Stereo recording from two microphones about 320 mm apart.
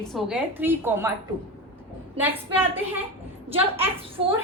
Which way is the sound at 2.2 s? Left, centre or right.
Centre.